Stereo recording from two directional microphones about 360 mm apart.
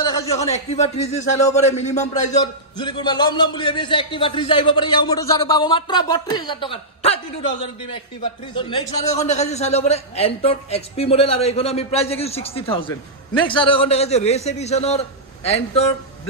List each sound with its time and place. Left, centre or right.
0.0 s a man's voice: centre